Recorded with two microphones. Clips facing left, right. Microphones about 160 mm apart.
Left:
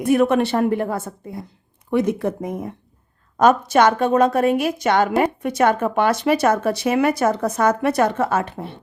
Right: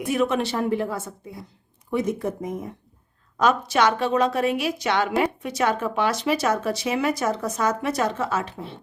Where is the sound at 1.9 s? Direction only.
65° left (ahead or behind).